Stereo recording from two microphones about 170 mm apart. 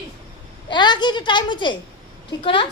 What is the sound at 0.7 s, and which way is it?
A woman's voice, 25° left (ahead or behind).